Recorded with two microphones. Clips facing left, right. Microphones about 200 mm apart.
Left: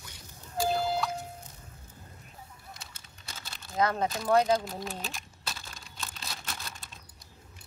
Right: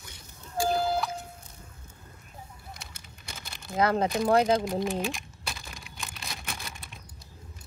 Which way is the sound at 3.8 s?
30° right (ahead or behind).